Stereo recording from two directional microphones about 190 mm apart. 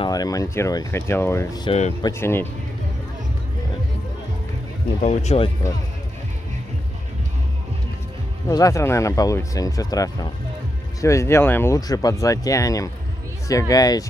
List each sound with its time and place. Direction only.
0.0 s speech: 20° left (ahead or behind)
1.7 s speech: 35° left (ahead or behind)
2.0 s speech: 15° left (ahead or behind)
5.0 s speech: 30° left (ahead or behind)
8.5 s speech: 15° left (ahead or behind)